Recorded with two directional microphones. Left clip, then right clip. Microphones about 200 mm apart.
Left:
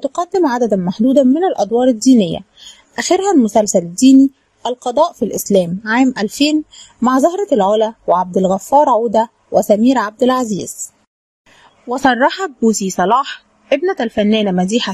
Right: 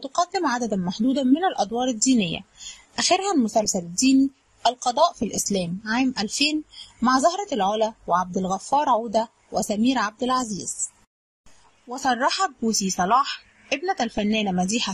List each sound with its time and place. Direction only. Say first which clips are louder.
0.0 s a woman's voice: left 8 dB; 30° left (ahead or behind)
11.9 s a woman's voice: left 10 dB; 35° left (ahead or behind)